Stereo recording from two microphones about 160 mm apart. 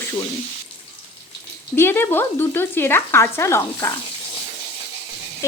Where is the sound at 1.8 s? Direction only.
15° left (ahead or behind).